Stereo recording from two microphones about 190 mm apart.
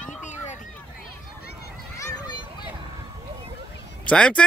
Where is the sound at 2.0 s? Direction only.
20° left (ahead or behind).